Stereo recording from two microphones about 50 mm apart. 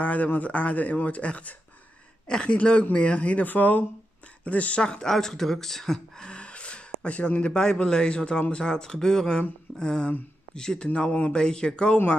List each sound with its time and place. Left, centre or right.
0.0 s speech: left
5.0 s speech: centre
10.9 s speech: left